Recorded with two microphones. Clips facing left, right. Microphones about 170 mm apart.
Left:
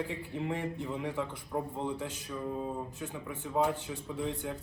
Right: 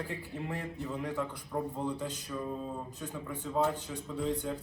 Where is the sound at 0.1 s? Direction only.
20° left (ahead or behind).